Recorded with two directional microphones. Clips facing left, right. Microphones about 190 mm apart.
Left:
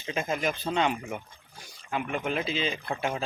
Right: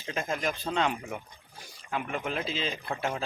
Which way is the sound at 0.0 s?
5° left (ahead or behind).